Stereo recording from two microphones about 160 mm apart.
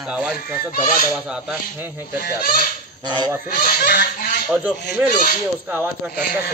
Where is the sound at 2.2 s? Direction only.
70° left (ahead or behind); by 4.2 s 90° left.